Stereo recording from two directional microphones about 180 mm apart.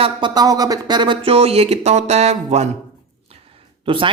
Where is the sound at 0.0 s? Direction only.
25° right (ahead or behind).